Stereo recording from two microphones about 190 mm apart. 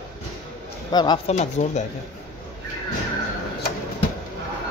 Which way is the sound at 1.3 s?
40° left (ahead or behind).